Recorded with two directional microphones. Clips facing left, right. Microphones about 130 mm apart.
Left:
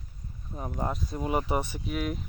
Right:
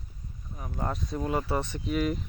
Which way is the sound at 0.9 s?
Centre (ahead or behind).